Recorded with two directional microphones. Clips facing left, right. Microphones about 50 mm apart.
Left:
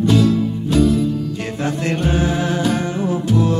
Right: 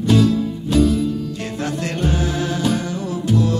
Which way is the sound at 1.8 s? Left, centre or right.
Left.